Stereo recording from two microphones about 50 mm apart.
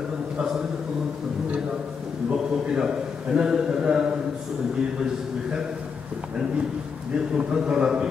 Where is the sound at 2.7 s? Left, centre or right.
Centre.